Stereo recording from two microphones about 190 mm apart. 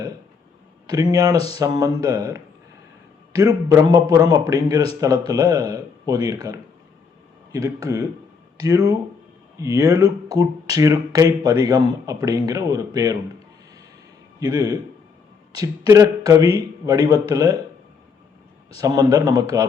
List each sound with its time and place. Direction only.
0.9 s speech: 20° right (ahead or behind)
14.3 s speech: 20° right (ahead or behind)
18.8 s speech: 20° right (ahead or behind)